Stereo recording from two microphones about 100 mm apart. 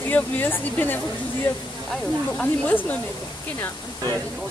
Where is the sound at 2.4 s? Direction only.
15° left (ahead or behind).